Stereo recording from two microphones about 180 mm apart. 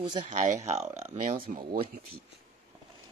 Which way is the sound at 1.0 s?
50° right (ahead or behind).